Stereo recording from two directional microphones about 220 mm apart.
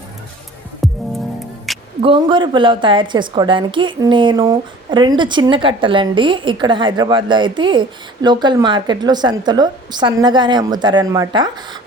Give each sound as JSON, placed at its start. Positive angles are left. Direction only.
{"t": 0.8, "sound": "music", "side_deg": 0}
{"t": 2.0, "sound": "a woman's voice", "side_deg": -25}